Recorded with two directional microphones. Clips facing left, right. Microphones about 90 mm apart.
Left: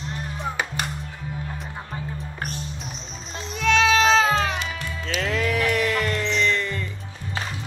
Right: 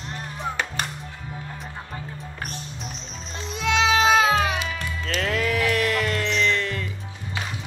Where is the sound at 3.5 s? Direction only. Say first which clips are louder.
Left 2 dB; 20° right (ahead or behind).